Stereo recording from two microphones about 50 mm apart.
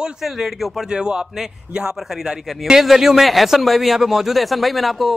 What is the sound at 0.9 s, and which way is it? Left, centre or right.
A man's voice, centre.